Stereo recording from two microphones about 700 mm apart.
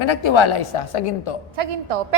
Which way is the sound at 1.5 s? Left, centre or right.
Right.